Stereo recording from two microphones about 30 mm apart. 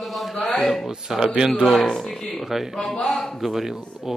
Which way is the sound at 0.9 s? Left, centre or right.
Centre.